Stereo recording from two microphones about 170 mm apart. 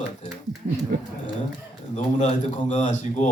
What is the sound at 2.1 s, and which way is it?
Speech, 45° left (ahead or behind).